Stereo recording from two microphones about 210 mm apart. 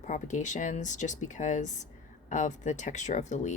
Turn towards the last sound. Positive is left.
turn(degrees=35)  # may be behind; listen again after turning